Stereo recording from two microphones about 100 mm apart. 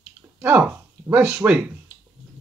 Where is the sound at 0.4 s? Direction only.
15° right (ahead or behind).